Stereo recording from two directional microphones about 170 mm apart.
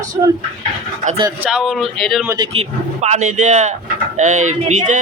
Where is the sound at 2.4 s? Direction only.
40° right (ahead or behind).